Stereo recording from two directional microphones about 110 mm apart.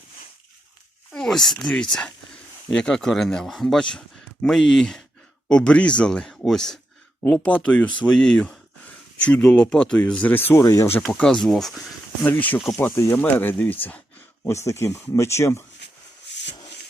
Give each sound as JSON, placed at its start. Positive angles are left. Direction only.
{"t": 1.1, "sound": "speech", "side_deg": 5}
{"t": 11.0, "sound": "speech", "side_deg": 5}
{"t": 12.8, "sound": "speech", "side_deg": 20}